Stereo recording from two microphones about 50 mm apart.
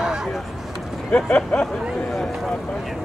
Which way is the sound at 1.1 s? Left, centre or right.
Centre.